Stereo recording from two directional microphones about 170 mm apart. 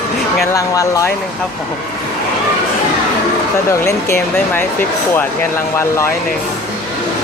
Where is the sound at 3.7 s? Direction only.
15° left (ahead or behind).